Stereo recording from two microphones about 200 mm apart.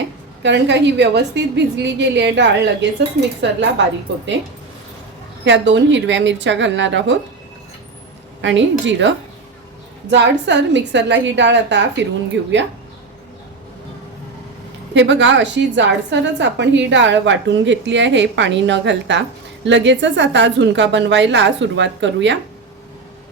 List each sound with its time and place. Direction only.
0.4 s a woman's voice: 60° right (ahead or behind)
5.5 s a woman's voice: 65° right (ahead or behind)
8.4 s a woman's voice: 65° right (ahead or behind)
14.9 s a woman's voice: 65° right (ahead or behind)